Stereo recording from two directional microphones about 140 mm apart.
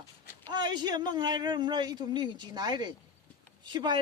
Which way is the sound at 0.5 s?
30° right (ahead or behind).